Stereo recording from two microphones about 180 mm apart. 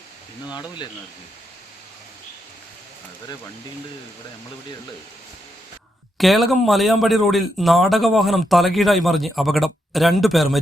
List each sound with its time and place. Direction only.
0.4 s speech: 25° left (ahead or behind)
6.1 s a man's voice: centre (ahead or behind)